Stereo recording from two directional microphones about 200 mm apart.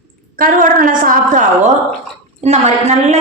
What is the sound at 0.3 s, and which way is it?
A woman's voice, 45° right (ahead or behind).